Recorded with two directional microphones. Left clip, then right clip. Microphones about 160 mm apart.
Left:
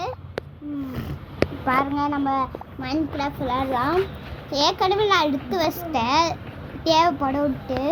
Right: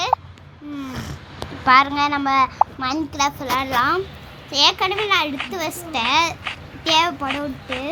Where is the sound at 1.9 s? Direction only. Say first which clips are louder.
Right 5 dB; 35° right (ahead or behind).